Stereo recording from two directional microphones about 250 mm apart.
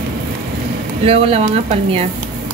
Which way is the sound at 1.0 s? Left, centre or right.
Right.